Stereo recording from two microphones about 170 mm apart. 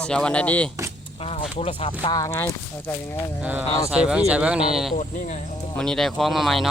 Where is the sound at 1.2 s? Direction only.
35° left (ahead or behind); by 3.2 s 15° left (ahead or behind).